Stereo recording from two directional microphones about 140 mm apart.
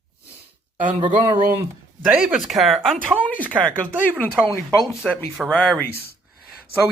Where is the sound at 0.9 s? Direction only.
35° right (ahead or behind).